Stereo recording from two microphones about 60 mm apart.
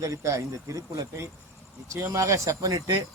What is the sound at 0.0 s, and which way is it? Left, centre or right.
Speech, right.